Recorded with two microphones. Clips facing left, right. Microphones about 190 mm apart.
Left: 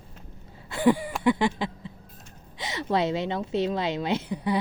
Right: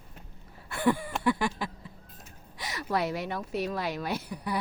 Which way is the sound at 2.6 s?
25° left (ahead or behind).